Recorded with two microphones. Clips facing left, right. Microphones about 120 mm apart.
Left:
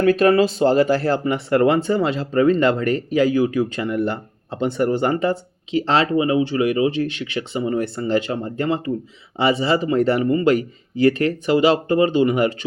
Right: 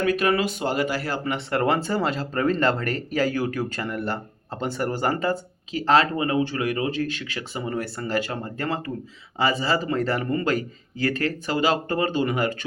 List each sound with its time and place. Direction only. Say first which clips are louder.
0.0 s speech: left 7 dB; 35° left (ahead or behind)
1.1 s speech: left 7 dB; 20° left (ahead or behind)
10.5 s speech: left 6 dB; 35° right (ahead or behind)
11.2 s speech: left 7 dB; 25° left (ahead or behind)